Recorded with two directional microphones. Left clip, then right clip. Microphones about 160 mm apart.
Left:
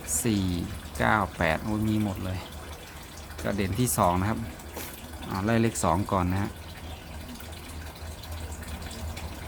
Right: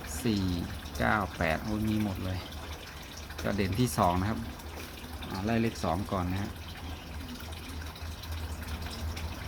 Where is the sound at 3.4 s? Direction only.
5° left (ahead or behind).